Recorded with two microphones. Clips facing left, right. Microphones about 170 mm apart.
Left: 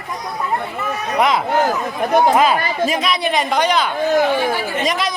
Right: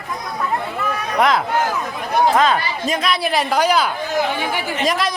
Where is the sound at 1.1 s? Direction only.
Centre (ahead or behind).